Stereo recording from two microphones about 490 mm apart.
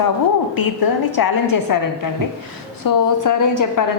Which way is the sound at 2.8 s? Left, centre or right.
Left.